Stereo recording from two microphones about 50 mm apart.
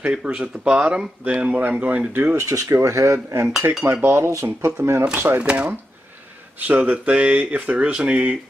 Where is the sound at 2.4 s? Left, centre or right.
Right.